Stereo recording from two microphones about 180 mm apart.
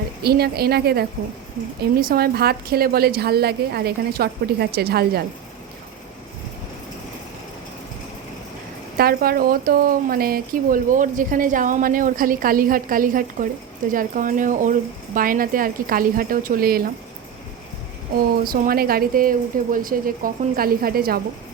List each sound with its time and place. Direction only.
0.2 s a woman's voice: 60° right (ahead or behind)
9.0 s speech: 55° right (ahead or behind)
18.4 s speech: 50° right (ahead or behind)